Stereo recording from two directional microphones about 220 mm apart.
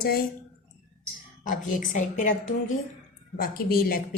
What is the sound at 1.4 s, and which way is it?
Speech, 35° left (ahead or behind).